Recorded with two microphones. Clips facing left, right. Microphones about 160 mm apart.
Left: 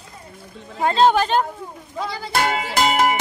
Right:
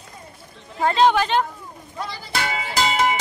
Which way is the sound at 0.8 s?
25° left (ahead or behind).